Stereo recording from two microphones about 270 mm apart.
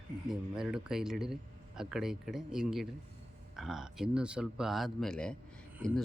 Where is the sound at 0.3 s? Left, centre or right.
Centre.